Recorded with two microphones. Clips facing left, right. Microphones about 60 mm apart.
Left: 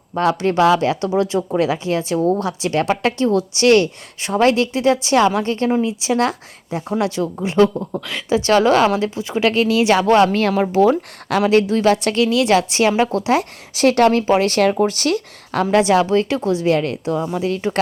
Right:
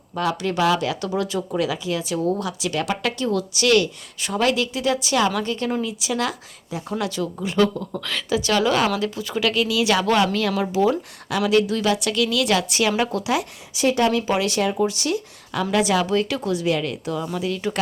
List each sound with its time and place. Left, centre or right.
0.1 s a woman's voice: left
1.5 s a woman's voice: left
7.9 s speech: left
8.4 s a woman's voice: left
8.9 s speech: left
9.5 s a woman's voice: left
10.8 s speech: left
11.4 s a woman's voice: left
13.7 s speech: left
14.1 s speech: left
15.6 s a woman's voice: left